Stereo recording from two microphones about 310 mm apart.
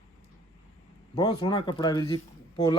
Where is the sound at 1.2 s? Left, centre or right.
Centre.